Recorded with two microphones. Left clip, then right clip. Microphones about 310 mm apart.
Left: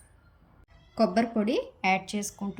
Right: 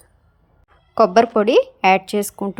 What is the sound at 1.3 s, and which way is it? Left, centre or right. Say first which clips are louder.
Speech: right 14 dB; right.